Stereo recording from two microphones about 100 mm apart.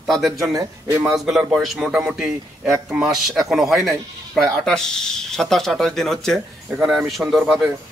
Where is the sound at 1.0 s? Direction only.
5° right (ahead or behind).